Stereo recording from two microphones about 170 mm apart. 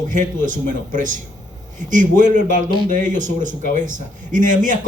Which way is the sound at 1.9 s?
50° right (ahead or behind).